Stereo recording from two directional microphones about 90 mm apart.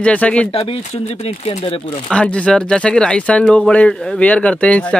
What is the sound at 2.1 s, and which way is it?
Speech, 15° left (ahead or behind).